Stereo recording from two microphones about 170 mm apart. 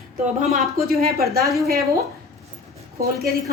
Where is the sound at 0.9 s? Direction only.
65° right (ahead or behind).